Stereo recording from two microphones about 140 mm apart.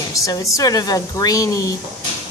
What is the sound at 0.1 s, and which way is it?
A woman's voice, 25° left (ahead or behind).